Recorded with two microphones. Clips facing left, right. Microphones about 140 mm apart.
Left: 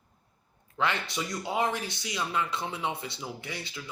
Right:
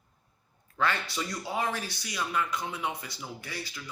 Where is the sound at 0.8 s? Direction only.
20° left (ahead or behind).